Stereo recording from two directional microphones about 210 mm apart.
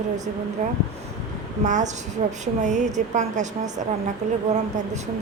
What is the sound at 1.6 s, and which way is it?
Speech, 35° right (ahead or behind).